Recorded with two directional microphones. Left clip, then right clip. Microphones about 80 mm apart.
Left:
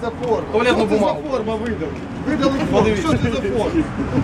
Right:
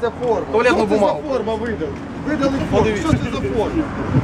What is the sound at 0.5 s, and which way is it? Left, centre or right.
Speech, right.